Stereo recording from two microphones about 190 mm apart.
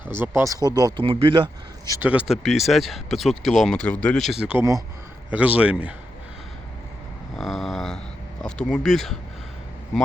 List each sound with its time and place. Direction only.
0.1 s speech: 10° right (ahead or behind)
1.9 s a man's voice: 10° right (ahead or behind)
7.3 s a sound: centre (ahead or behind)
8.4 s speech: 5° left (ahead or behind)